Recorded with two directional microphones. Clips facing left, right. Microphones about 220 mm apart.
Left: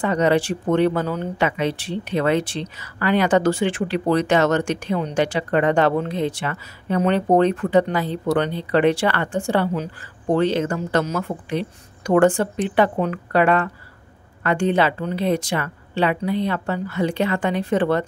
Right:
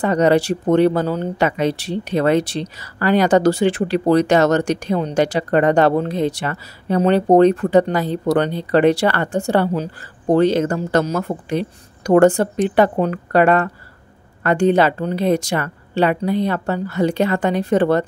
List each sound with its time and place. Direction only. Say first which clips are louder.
0.0 s speech: right 3 dB; 40° right (ahead or behind)